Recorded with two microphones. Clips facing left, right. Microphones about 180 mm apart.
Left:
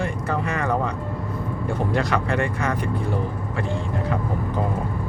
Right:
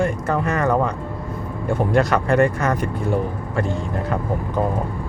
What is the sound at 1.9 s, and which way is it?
Speech, 45° right (ahead or behind).